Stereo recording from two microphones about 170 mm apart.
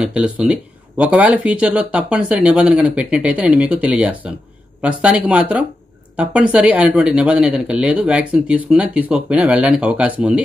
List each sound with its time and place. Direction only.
0.0 s speech: 5° right (ahead or behind)